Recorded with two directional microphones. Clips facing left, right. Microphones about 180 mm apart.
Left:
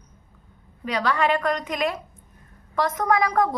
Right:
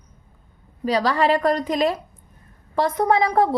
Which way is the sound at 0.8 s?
35° right (ahead or behind).